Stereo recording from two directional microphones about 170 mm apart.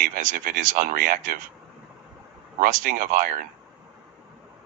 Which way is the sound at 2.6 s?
55° right (ahead or behind).